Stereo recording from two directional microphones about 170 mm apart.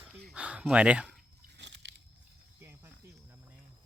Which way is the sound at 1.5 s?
90° right.